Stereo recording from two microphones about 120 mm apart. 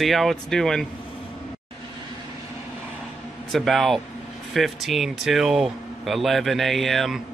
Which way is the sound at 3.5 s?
Centre (ahead or behind).